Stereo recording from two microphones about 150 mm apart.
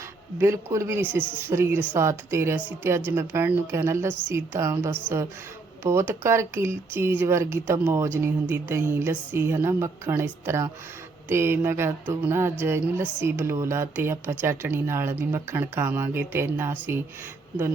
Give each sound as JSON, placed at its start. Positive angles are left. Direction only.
{"t": 0.3, "sound": "speech", "side_deg": -20}
{"t": 1.5, "sound": "music", "side_deg": -15}
{"t": 1.9, "sound": "speech", "side_deg": -20}
{"t": 3.1, "sound": "music", "side_deg": -15}